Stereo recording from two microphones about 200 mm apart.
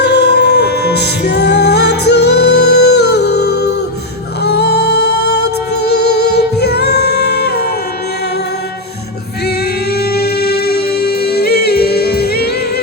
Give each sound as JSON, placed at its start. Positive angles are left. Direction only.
{"t": 0.0, "sound": "music", "side_deg": 55}
{"t": 9.9, "sound": "music", "side_deg": 50}